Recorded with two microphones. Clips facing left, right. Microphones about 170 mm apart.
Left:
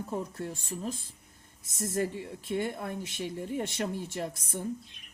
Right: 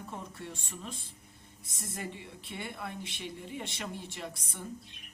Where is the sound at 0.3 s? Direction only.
40° left (ahead or behind).